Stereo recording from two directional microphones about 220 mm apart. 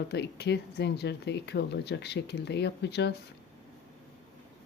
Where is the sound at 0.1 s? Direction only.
50° left (ahead or behind).